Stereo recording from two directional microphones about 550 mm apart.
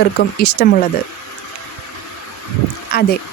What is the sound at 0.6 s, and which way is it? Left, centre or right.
Speech, centre.